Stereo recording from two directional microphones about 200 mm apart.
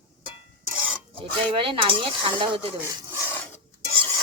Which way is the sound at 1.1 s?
25° right (ahead or behind).